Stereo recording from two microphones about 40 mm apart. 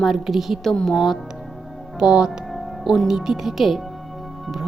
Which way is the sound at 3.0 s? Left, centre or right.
Centre.